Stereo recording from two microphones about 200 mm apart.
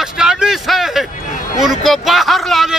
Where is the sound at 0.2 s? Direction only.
5° right (ahead or behind).